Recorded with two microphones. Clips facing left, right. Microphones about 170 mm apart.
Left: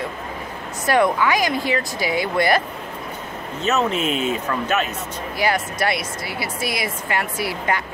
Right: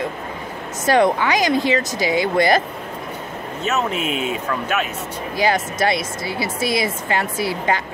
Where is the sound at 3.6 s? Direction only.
10° right (ahead or behind).